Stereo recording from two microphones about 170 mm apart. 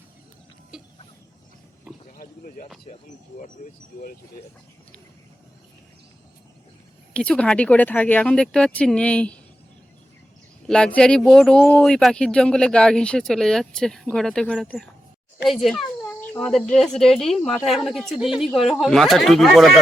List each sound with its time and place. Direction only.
2.1 s a sound: 55° left (ahead or behind)
7.1 s speech: 5° left (ahead or behind)
10.7 s speech: 5° left (ahead or behind)